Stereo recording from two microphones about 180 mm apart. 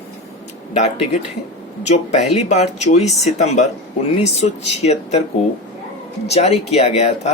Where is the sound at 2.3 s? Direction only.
35° left (ahead or behind).